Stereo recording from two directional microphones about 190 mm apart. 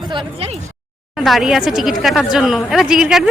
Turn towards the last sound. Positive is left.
turn(degrees=-5)  # may be behind; listen again after turning